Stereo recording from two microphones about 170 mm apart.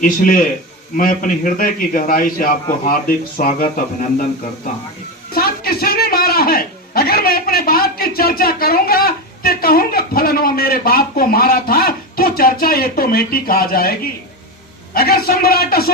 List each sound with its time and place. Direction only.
0.0 s a man's voice: 50° left (ahead or behind)
5.3 s a sound: 60° left (ahead or behind)
14.9 s a man's voice: 65° left (ahead or behind)